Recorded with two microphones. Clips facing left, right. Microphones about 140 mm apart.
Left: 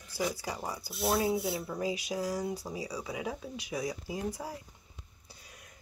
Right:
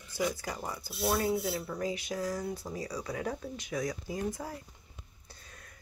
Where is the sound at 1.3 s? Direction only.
15° left (ahead or behind).